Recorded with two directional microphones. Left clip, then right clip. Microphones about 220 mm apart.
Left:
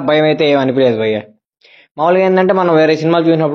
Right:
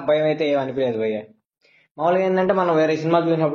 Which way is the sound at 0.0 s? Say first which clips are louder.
Left 7 dB; 50° left (ahead or behind).